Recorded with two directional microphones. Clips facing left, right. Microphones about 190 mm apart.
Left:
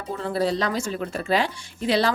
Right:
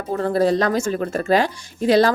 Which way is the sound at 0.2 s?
50° right (ahead or behind).